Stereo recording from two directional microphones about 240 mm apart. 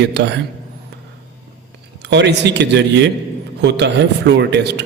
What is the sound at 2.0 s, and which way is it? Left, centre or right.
A man's voice, right.